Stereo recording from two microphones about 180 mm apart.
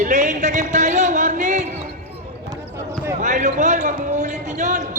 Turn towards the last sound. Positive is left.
turn(degrees=-40)  # may be behind; listen again after turning